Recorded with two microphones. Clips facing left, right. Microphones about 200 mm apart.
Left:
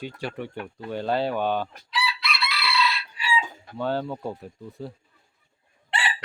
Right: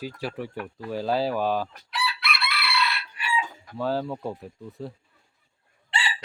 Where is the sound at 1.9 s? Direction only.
60° right (ahead or behind).